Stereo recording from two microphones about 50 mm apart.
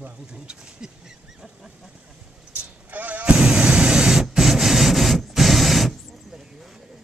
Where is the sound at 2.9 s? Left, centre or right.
Right; by 6.7 s centre.